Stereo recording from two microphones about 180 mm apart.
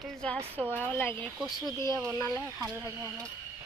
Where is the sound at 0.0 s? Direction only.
5° left (ahead or behind).